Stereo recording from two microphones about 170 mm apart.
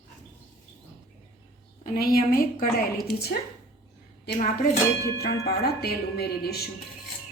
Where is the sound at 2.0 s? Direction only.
60° left (ahead or behind).